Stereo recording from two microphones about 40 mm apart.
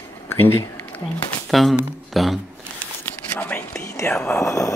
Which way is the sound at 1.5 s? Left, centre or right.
Centre.